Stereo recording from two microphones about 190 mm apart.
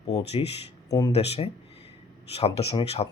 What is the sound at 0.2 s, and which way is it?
Speech, 30° left (ahead or behind).